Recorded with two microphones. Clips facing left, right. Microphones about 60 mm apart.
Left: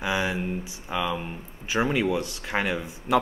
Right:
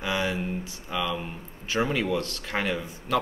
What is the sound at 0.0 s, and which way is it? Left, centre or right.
Speech, centre.